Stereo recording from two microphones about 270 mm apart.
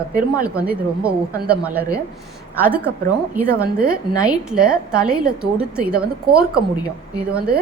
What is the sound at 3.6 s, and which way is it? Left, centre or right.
Speech, right.